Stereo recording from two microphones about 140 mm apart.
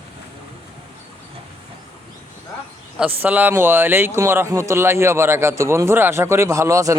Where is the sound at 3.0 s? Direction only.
10° right (ahead or behind).